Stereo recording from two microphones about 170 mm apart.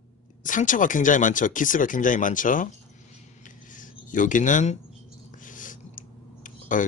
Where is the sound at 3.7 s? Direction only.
50° left (ahead or behind).